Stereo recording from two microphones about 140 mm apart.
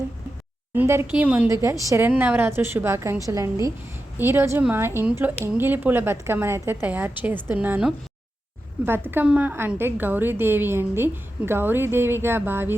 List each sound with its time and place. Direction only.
0.8 s a woman's voice: 15° right (ahead or behind)
1.5 s a woman's voice: 20° right (ahead or behind)